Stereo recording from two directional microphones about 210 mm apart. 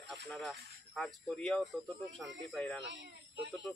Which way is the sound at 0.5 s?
50° right (ahead or behind).